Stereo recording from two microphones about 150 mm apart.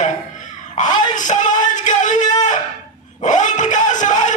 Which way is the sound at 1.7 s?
55° left (ahead or behind).